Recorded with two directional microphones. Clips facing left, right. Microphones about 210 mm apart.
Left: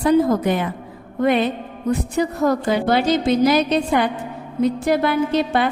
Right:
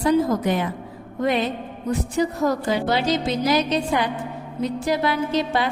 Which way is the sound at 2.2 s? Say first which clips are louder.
Left 1 dB; 55° left (ahead or behind).